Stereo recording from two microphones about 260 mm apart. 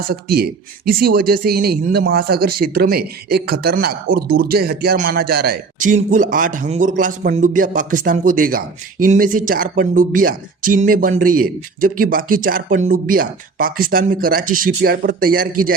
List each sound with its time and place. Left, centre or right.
0.1 s a man's voice: right